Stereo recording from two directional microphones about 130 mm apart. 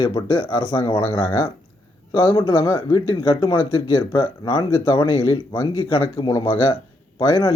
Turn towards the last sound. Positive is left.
turn(degrees=40)  # may be behind; listen again after turning